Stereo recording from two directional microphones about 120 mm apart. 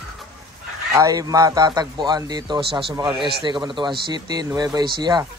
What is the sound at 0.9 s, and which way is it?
A man's voice, 30° right (ahead or behind).